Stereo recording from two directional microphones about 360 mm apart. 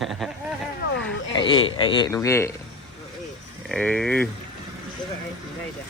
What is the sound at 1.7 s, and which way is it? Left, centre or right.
Speech, centre.